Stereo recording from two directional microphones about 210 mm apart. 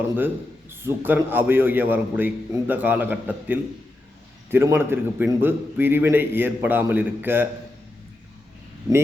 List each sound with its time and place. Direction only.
0.7 s a man's voice: 10° right (ahead or behind)